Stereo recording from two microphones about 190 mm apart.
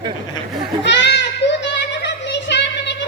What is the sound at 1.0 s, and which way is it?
Child singing, 65° left (ahead or behind).